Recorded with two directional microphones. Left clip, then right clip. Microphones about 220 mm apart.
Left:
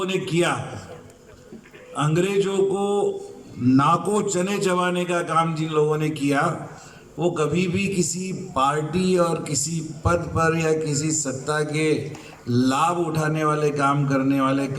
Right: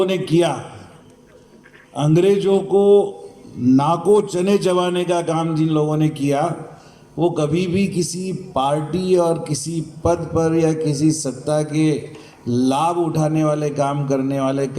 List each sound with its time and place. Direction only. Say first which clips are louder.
0.0 s a man's voice: right 5 dB; 25° right (ahead or behind)
1.9 s a man's voice: right 7 dB; 25° right (ahead or behind)